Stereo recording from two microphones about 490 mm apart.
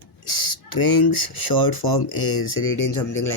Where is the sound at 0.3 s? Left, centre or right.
Left.